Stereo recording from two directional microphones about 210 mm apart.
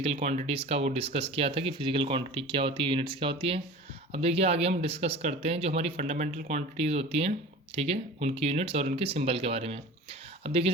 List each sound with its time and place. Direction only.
0.0 s speech: 30° right (ahead or behind)